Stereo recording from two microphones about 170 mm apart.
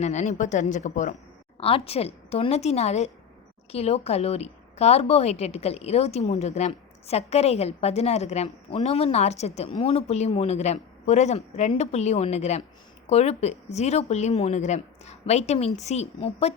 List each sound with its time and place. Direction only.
0.0 s speech: 45° left (ahead or behind)
1.5 s a woman's voice: 35° left (ahead or behind)